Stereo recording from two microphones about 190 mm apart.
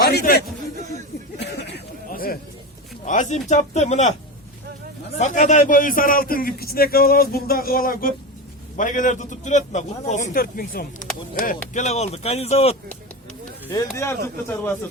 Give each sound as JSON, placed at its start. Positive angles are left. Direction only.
{"t": 0.0, "sound": "a sound", "side_deg": 55}
{"t": 3.0, "sound": "a man's voice", "side_deg": 40}
{"t": 5.1, "sound": "a man's voice", "side_deg": 40}
{"t": 11.7, "sound": "a man's voice", "side_deg": 35}
{"t": 13.9, "sound": "speech", "side_deg": 15}